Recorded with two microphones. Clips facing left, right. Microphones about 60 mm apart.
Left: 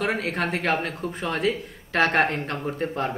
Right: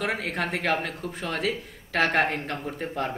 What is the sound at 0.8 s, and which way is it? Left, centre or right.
Speech, centre.